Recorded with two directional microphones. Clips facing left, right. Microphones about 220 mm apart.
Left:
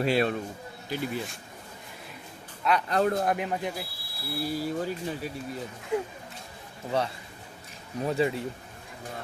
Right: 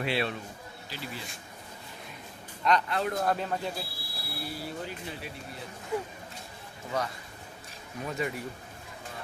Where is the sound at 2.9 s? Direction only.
40° left (ahead or behind).